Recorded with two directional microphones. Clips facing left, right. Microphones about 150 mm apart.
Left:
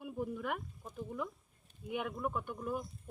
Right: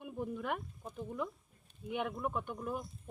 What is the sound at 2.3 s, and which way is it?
Speech, 15° right (ahead or behind).